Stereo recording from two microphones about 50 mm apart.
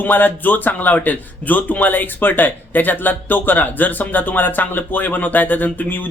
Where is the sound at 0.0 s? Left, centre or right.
Left.